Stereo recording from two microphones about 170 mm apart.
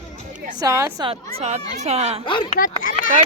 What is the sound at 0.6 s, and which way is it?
Speech, 20° right (ahead or behind).